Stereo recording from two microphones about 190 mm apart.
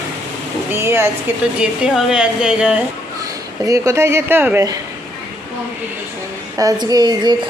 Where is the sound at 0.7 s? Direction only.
15° right (ahead or behind).